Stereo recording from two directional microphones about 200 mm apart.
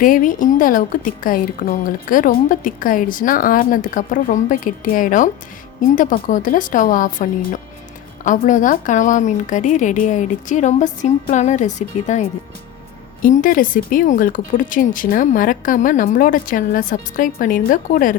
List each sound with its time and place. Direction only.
0.0 s a woman's voice: 45° left (ahead or behind)
13.2 s a woman's voice: 40° left (ahead or behind)